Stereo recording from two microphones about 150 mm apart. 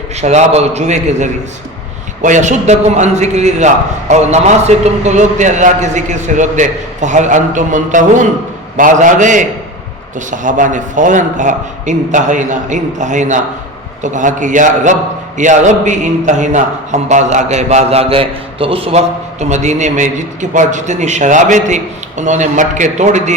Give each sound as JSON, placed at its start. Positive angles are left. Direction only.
{"t": 0.2, "sound": "a man's voice", "side_deg": -45}